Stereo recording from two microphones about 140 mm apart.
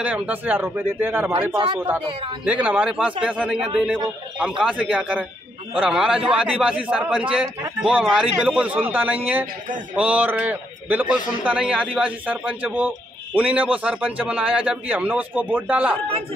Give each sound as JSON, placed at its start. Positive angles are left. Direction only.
{"t": 0.0, "sound": "a man's voice", "side_deg": -10}
{"t": 2.4, "sound": "a man's voice", "side_deg": -10}